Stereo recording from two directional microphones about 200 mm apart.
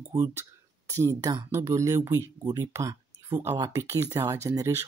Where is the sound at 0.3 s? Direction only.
15° right (ahead or behind).